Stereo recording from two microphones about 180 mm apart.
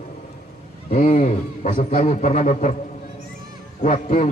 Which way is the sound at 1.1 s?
50° left (ahead or behind).